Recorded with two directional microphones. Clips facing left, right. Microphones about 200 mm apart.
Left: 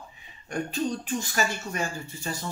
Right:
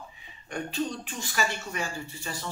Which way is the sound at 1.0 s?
45° left (ahead or behind).